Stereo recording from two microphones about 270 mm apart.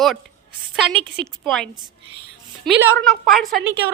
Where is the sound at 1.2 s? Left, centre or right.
Centre.